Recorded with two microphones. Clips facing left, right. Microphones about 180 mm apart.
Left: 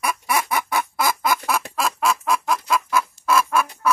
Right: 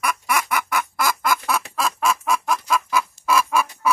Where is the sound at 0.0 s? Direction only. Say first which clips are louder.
Even; 30° left (ahead or behind).